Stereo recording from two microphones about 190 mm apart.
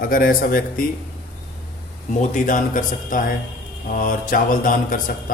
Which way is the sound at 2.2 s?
45° left (ahead or behind).